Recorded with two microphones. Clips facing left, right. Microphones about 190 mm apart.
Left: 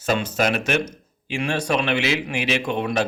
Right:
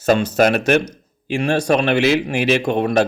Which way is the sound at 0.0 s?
40° right (ahead or behind).